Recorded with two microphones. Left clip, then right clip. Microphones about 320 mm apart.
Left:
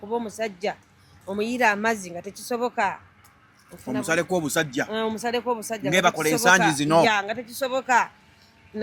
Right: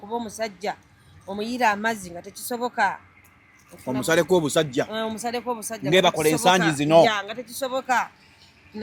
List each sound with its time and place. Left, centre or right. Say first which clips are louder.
0.1 s a woman's voice: left 1 dB; left
4.0 s speech: right 4 dB; right
4.9 s a woman's voice: left 2 dB; left
5.9 s speech: right 2 dB; right
6.7 s speech: right 3 dB; centre
7.0 s a woman's voice: right 1 dB; left